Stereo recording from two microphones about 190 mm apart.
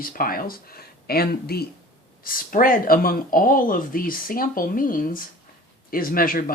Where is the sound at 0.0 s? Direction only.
50° left (ahead or behind).